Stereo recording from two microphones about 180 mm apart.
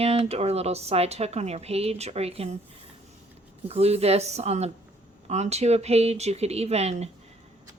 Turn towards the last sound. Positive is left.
turn(degrees=-35)  # may be behind; listen again after turning